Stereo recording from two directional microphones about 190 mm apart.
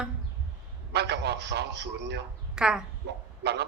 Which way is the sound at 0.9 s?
60° right (ahead or behind).